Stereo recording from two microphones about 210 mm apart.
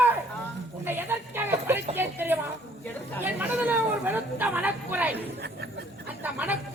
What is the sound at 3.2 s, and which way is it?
Speech, 10° right (ahead or behind).